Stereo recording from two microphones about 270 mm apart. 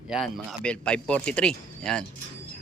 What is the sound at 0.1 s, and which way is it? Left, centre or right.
Speech, centre.